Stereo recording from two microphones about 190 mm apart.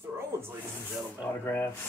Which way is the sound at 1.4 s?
10° left (ahead or behind).